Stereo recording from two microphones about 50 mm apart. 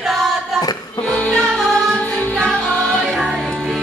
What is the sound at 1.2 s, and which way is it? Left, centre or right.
Music, centre.